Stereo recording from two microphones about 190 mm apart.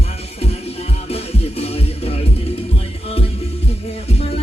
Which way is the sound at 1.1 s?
30° left (ahead or behind).